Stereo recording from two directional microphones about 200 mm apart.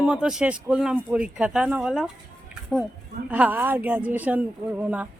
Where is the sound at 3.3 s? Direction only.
10° right (ahead or behind).